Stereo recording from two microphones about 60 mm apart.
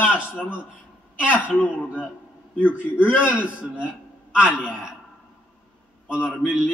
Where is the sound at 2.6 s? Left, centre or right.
Right.